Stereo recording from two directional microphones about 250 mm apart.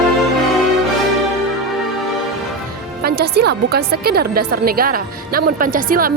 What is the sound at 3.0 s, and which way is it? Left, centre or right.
A woman's voice, right.